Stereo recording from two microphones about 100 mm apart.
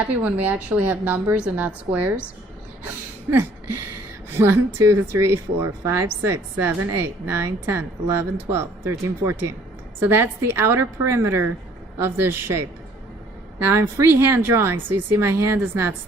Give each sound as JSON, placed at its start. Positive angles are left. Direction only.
{"t": 0.2, "sound": "a woman's voice", "side_deg": -15}
{"t": 4.4, "sound": "a woman's voice", "side_deg": -25}
{"t": 13.7, "sound": "a woman's voice", "side_deg": -25}